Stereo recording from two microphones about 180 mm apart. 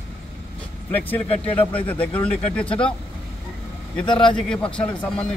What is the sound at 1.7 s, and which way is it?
Speech, 10° left (ahead or behind).